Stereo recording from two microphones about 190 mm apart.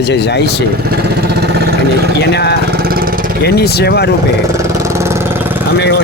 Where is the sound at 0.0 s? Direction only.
60° left (ahead or behind).